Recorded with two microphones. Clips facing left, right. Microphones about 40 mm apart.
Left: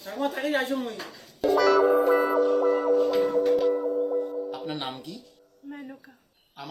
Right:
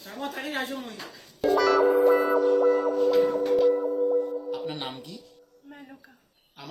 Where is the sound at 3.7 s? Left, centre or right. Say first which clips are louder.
Right 2 dB; centre.